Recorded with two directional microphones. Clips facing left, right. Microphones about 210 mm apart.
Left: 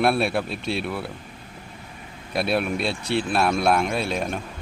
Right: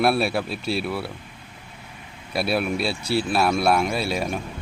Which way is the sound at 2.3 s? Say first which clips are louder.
Even; 5° right (ahead or behind).